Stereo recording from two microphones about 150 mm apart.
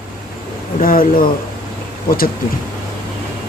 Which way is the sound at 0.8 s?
70° left (ahead or behind).